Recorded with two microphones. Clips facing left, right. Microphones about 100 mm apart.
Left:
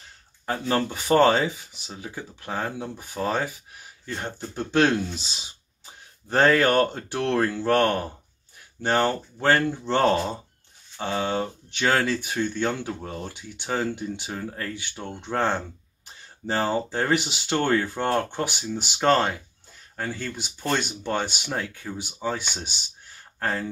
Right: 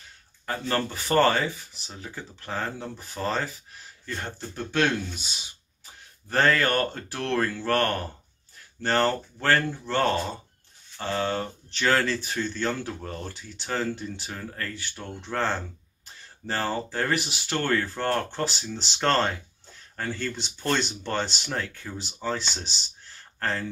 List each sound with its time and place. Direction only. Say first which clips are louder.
0.5 s speech: left 3 dB; 15° left (ahead or behind)